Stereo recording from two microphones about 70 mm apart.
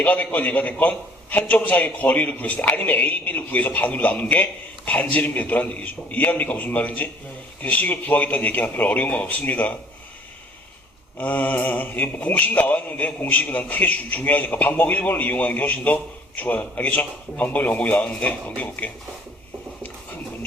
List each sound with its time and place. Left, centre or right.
0.0 s speech: left
11.2 s speech: left